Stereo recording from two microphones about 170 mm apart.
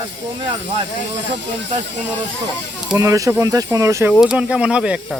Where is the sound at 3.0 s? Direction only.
20° right (ahead or behind).